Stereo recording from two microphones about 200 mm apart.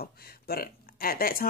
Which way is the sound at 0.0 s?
50° left (ahead or behind).